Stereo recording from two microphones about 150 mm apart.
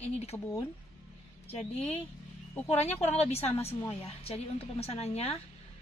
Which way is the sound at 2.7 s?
45° left (ahead or behind).